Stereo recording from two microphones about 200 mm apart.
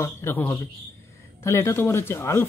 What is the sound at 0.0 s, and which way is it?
A man's voice, 10° left (ahead or behind).